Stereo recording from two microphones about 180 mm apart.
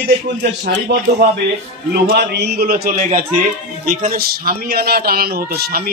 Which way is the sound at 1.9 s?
65° right (ahead or behind).